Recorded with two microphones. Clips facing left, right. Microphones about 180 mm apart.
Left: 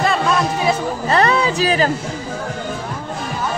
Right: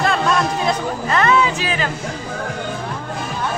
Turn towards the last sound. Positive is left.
turn(degrees=35)  # may be behind; listen again after turning